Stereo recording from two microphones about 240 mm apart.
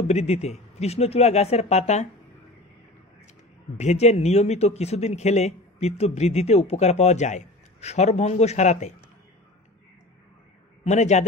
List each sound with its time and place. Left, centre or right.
0.1 s speech: left
3.7 s speech: left
10.8 s speech: left